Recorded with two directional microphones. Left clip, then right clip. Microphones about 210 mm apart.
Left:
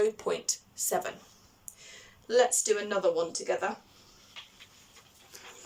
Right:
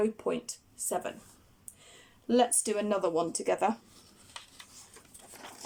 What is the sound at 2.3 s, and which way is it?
Speech, 20° right (ahead or behind).